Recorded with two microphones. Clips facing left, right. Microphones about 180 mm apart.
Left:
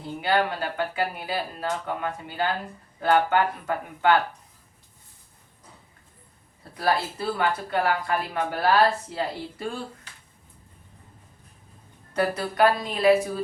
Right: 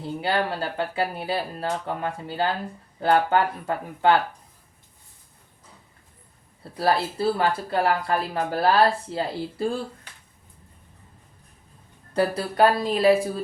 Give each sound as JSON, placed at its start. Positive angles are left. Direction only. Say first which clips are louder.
{"t": 0.2, "sound": "speech", "louder": "left 2 dB", "side_deg": -30}
{"t": 6.7, "sound": "speech", "louder": "right 2 dB", "side_deg": -30}
{"t": 12.1, "sound": "speech", "louder": "right 2 dB", "side_deg": -30}